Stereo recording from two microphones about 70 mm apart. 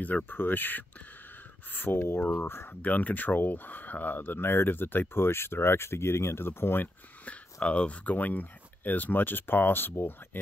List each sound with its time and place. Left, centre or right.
0.0 s speech: left
2.8 s speech: left
7.6 s speech: centre